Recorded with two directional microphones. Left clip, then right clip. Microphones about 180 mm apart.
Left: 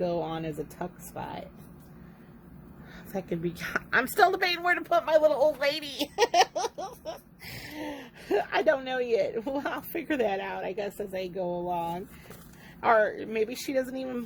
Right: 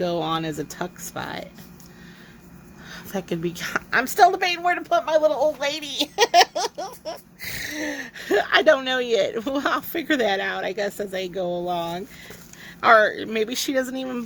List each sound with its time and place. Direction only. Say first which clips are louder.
0.0 s speech: right 6 dB; 35° right (ahead or behind)
2.9 s a woman's voice: right 5 dB; 30° right (ahead or behind)